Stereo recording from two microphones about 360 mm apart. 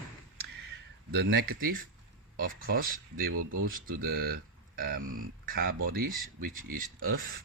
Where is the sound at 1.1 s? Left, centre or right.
Right.